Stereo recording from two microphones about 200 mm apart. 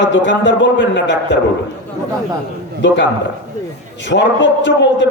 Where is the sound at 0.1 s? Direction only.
65° left (ahead or behind).